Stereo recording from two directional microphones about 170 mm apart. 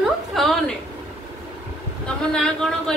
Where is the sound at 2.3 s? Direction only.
5° left (ahead or behind).